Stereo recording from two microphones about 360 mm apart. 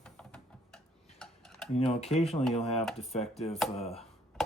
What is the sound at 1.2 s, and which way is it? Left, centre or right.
Typing, centre.